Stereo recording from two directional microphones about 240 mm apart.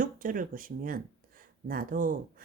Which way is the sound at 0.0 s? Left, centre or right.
Right.